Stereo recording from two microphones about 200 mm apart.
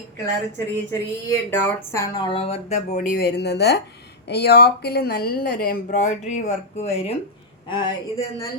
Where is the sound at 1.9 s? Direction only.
20° left (ahead or behind).